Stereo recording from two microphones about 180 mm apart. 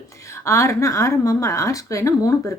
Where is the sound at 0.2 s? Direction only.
15° left (ahead or behind).